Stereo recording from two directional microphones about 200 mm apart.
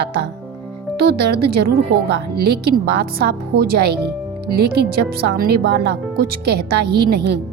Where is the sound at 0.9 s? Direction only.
55° right (ahead or behind).